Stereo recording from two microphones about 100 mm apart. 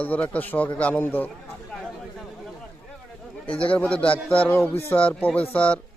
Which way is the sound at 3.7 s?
15° left (ahead or behind).